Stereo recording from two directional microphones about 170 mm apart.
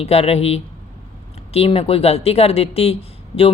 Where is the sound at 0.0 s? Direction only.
35° left (ahead or behind).